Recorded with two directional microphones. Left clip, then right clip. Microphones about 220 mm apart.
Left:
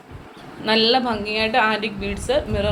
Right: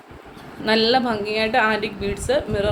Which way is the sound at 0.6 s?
25° right (ahead or behind).